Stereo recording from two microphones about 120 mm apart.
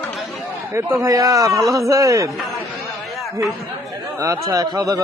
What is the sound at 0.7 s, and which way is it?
A man's voice, 20° right (ahead or behind).